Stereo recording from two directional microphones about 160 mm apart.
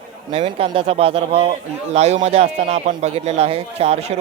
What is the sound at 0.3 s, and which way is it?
A man's voice, 35° right (ahead or behind).